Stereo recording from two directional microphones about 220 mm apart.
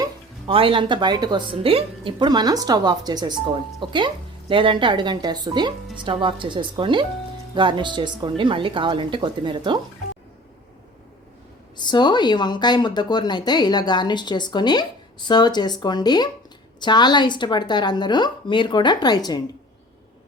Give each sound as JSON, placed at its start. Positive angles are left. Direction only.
{"t": 0.0, "sound": "speech", "side_deg": -25}
{"t": 11.8, "sound": "speech", "side_deg": 20}